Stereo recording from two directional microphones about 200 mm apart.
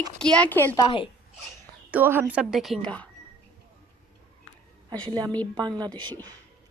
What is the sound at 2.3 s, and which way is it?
Speech, 5° right (ahead or behind).